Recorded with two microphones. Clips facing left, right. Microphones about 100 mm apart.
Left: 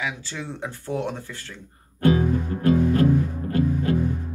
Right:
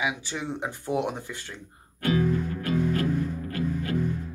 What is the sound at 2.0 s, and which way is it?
Music, 30° left (ahead or behind).